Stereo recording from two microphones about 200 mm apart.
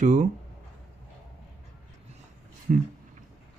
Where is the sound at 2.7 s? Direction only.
45° right (ahead or behind).